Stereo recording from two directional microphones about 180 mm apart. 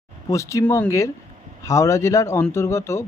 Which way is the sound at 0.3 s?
15° left (ahead or behind).